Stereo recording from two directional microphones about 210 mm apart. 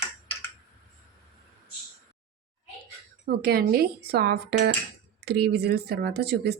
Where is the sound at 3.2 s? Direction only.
50° right (ahead or behind).